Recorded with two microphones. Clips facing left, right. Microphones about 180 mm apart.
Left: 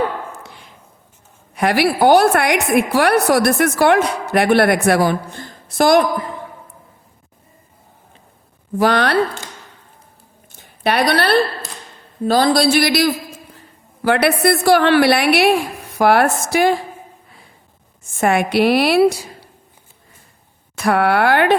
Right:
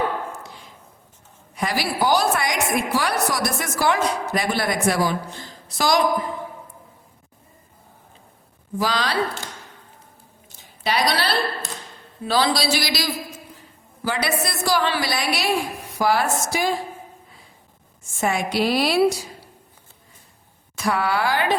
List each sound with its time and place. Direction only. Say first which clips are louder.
0.4 s a sound: left 1 dB; 65° left (ahead or behind)
1.5 s a woman's voice: left 8 dB; 65° left (ahead or behind)
8.8 s a woman's voice: left 8 dB; 60° left (ahead or behind)
10.5 s a sound: left 6 dB; 55° left (ahead or behind)
12.2 s a woman's voice: left 7 dB; 45° left (ahead or behind); by 16.7 s 60° left (ahead or behind)
18.2 s a woman's voice: left 7 dB; 60° left (ahead or behind)
20.7 s a woman's voice: left 7 dB; 60° left (ahead or behind)